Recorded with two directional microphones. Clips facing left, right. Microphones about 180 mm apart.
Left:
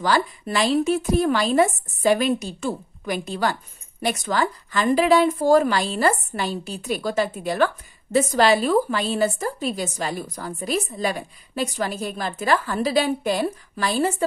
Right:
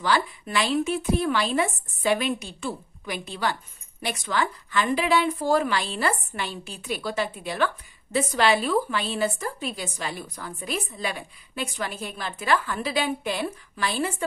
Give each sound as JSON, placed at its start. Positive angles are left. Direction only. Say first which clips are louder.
{"t": 0.0, "sound": "a woman's voice", "louder": "left 3 dB", "side_deg": 40}